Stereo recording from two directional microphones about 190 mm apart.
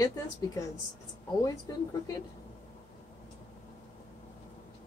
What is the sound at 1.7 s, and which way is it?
Speech, 20° left (ahead or behind).